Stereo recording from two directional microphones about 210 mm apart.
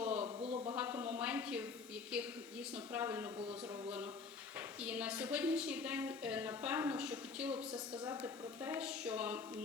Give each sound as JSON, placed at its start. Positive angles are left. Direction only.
{"t": 0.2, "sound": "a sound", "side_deg": -30}
{"t": 0.8, "sound": "a sound", "side_deg": -10}
{"t": 2.7, "sound": "speech", "side_deg": -10}
{"t": 4.8, "sound": "a woman's voice", "side_deg": -5}
{"t": 7.7, "sound": "a woman's voice", "side_deg": -20}
{"t": 8.2, "sound": "speech", "side_deg": -5}